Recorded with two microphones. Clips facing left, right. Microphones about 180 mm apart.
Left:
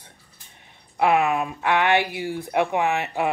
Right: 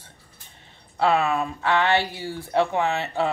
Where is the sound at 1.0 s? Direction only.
15° left (ahead or behind).